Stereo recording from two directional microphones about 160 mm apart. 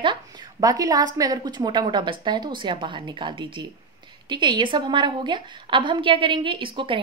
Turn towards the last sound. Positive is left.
turn(degrees=-30)  # may be behind; listen again after turning